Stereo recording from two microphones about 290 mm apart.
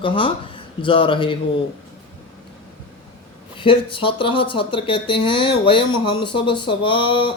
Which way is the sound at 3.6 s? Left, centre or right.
Centre.